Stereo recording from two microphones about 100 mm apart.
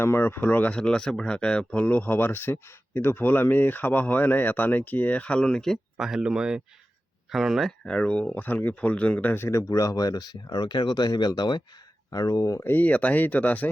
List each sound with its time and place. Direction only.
0.0 s speech: 20° left (ahead or behind); by 7.7 s 5° right (ahead or behind)
7.9 s speech: 10° left (ahead or behind); by 12.6 s 35° left (ahead or behind)
12.6 s speech: 15° left (ahead or behind)